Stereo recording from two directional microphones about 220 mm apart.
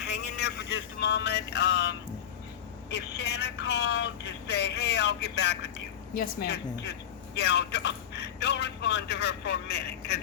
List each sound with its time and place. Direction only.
0.1 s vehicle: 50° left (ahead or behind)
2.9 s speech: 50° left (ahead or behind)